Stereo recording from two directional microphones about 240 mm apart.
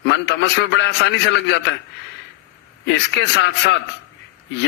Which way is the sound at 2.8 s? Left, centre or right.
Left.